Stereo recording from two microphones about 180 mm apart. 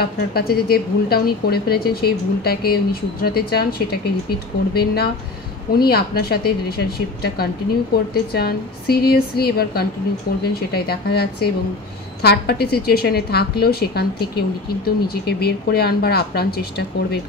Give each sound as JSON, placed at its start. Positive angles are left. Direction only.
{"t": 0.0, "sound": "a woman's voice", "side_deg": 60}
{"t": 8.1, "sound": "a woman's voice", "side_deg": 60}